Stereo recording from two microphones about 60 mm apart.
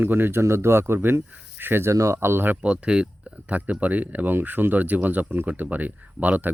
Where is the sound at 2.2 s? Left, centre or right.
Right.